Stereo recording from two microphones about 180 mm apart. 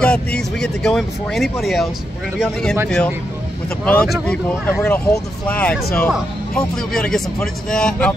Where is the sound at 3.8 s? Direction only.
5° left (ahead or behind).